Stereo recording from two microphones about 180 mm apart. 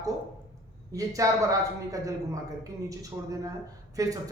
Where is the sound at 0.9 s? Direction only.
20° right (ahead or behind).